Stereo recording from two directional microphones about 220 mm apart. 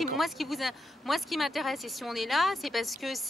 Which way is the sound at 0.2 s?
Centre (ahead or behind).